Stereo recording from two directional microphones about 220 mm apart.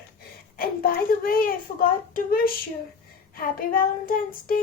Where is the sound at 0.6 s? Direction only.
40° left (ahead or behind).